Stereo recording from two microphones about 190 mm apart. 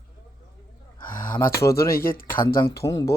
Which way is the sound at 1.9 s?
50° left (ahead or behind).